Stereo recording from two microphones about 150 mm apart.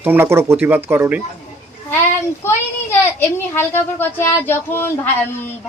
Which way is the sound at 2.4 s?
15° left (ahead or behind).